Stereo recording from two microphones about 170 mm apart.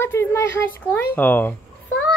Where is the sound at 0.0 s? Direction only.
15° left (ahead or behind).